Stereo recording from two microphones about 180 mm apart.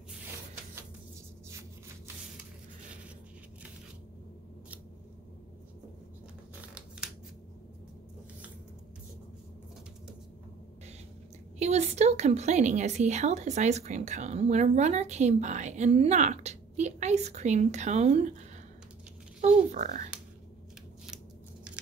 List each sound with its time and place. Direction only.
11.5 s a woman's voice: 35° right (ahead or behind)
19.7 s speech: 40° right (ahead or behind)